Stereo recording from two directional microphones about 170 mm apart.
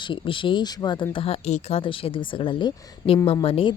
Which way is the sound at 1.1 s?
35° left (ahead or behind).